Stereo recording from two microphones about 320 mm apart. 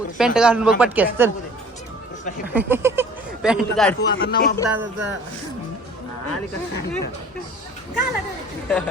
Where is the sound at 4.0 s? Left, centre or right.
Left.